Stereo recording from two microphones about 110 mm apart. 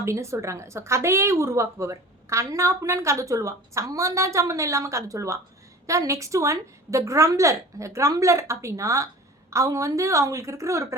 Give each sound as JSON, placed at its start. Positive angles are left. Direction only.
{"t": 0.0, "sound": "a woman's voice", "side_deg": -25}